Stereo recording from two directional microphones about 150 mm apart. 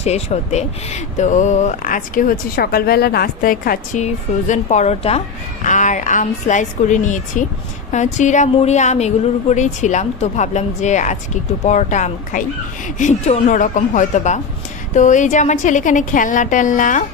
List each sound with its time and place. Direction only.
0.0 s a woman's voice: 45° left (ahead or behind); by 4.0 s 70° left (ahead or behind)
4.0 s a woman's voice: 50° left (ahead or behind)